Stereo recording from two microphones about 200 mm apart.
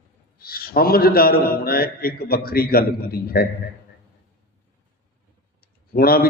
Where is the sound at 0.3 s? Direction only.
50° left (ahead or behind).